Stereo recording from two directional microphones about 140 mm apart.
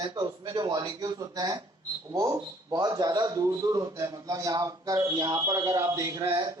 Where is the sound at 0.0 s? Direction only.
30° right (ahead or behind).